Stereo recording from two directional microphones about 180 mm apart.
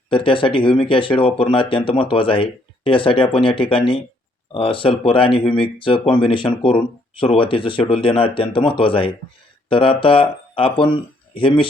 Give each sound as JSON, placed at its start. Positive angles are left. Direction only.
{"t": 0.1, "sound": "speech", "side_deg": 30}